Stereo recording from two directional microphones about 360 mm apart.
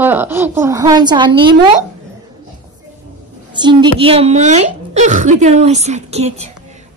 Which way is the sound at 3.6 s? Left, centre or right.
Centre.